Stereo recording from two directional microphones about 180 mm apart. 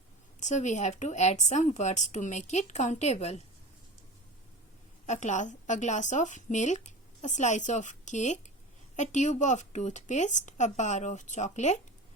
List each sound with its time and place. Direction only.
0.3 s a woman's voice: 40° left (ahead or behind)
5.0 s a woman's voice: 40° left (ahead or behind)